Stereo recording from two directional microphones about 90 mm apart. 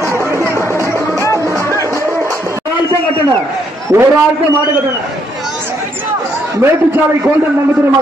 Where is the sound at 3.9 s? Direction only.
40° right (ahead or behind).